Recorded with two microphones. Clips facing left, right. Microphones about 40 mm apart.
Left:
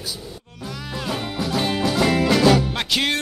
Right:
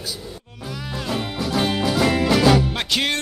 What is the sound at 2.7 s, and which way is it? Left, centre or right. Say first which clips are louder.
Music: even; centre.